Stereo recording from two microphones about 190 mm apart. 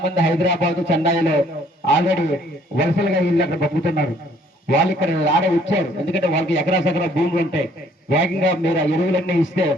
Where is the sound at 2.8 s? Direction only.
65° left (ahead or behind).